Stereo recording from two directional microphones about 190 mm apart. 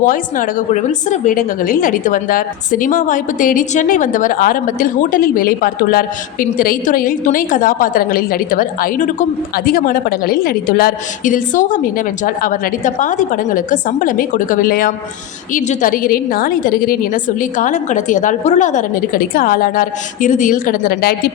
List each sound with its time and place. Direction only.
0.0 s a woman's voice: 45° left (ahead or behind)